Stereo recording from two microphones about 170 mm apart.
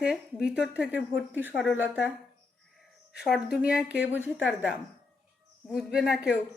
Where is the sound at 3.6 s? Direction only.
5° right (ahead or behind).